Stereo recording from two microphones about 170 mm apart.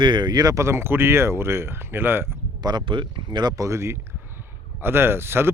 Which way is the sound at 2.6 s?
25° right (ahead or behind).